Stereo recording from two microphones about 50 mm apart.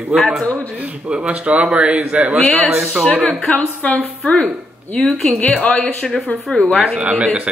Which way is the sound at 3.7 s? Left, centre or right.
Left.